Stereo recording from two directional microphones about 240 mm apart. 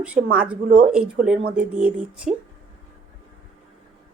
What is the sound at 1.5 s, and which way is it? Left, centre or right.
Speech, centre.